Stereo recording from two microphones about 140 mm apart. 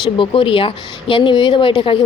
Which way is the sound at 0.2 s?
40° left (ahead or behind).